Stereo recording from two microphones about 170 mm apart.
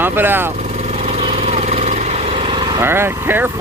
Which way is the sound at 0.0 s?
10° right (ahead or behind).